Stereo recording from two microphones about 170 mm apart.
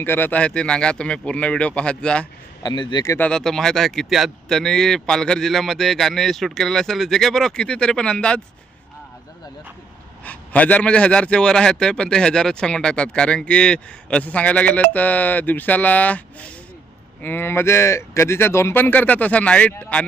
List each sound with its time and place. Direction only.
0.0 s a man's voice: 10° left (ahead or behind)
2.6 s a man's voice: 25° left (ahead or behind)
3.2 s speech: 5° left (ahead or behind)
10.2 s a man's voice: 10° left (ahead or behind)